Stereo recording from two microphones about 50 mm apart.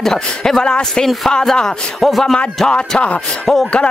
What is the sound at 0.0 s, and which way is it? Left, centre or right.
Speech, centre.